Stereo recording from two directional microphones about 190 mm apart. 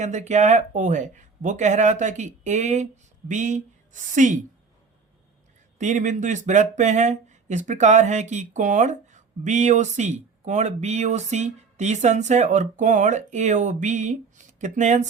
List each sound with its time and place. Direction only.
0.0 s speech: 40° right (ahead or behind)
5.8 s speech: 40° right (ahead or behind)